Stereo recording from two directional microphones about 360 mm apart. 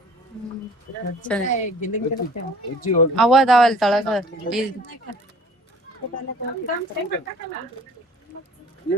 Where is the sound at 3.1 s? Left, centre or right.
Centre.